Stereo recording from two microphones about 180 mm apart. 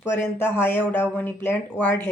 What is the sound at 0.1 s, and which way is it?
Speech, 15° left (ahead or behind).